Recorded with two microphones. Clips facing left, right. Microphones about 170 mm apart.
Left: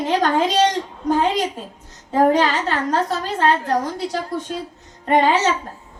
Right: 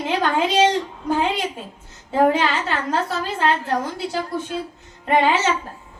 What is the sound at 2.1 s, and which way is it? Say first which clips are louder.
A woman's voice: left 2 dB; 40° left (ahead or behind).